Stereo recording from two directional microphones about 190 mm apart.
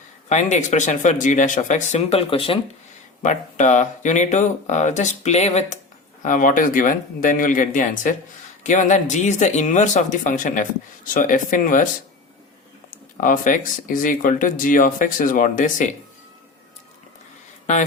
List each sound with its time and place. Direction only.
0.3 s speech: 40° left (ahead or behind)
3.2 s speech: 40° left (ahead or behind)
13.1 s speech: 45° left (ahead or behind)